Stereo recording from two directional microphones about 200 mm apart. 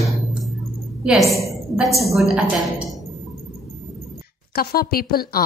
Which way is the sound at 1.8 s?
Centre (ahead or behind).